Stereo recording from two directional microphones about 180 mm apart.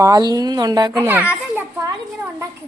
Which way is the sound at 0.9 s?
10° right (ahead or behind).